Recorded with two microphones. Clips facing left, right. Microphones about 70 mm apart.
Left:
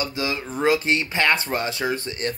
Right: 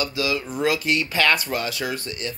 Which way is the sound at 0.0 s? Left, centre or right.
Left.